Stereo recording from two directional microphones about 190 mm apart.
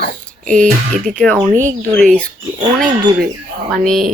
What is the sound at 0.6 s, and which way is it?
Speech, 45° right (ahead or behind).